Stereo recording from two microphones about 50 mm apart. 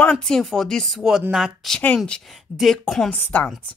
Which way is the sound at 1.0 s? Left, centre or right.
Centre.